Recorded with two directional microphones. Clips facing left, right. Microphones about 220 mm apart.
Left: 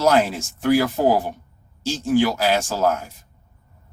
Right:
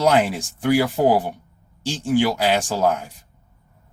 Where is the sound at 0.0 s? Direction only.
15° right (ahead or behind).